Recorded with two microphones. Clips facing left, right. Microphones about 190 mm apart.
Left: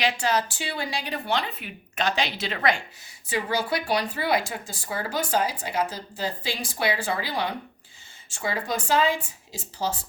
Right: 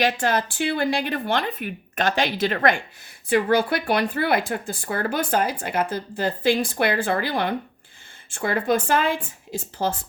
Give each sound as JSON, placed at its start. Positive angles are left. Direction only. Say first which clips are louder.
{"t": 0.0, "sound": "a woman's voice", "louder": "right 3 dB", "side_deg": -50}